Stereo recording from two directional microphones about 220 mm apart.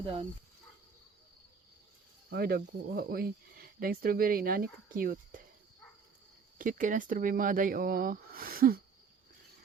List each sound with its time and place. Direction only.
0.0 s speech: 25° right (ahead or behind)
2.3 s speech: 45° right (ahead or behind)
6.6 s speech: 35° right (ahead or behind)